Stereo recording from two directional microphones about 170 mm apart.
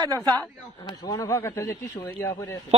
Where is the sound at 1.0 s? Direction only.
20° left (ahead or behind).